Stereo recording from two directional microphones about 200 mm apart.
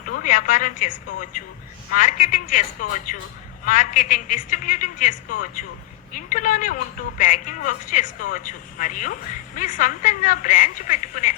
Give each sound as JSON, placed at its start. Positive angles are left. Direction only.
{"t": 0.0, "sound": "a woman's voice", "side_deg": 40}